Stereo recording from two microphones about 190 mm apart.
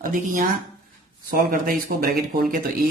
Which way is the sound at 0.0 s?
45° right (ahead or behind).